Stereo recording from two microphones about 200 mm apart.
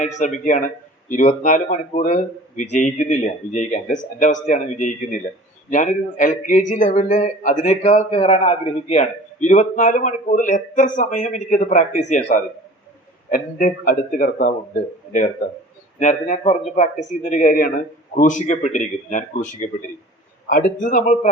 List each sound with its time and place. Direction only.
0.0 s speech: 40° left (ahead or behind)
16.0 s speech: 40° left (ahead or behind)